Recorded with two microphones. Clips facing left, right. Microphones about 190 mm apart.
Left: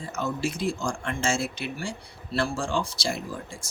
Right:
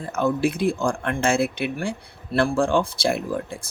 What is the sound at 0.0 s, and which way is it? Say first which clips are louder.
Speech: right 7 dB; 55° right (ahead or behind).